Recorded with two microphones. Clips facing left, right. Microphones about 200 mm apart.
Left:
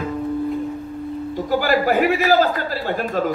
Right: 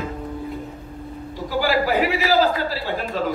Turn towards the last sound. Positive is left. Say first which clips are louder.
# left 3 dB
turn(degrees=50)  # may be behind; listen again after turning